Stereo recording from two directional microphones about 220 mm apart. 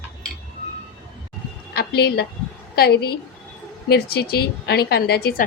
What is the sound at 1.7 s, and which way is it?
A woman's voice, 45° left (ahead or behind).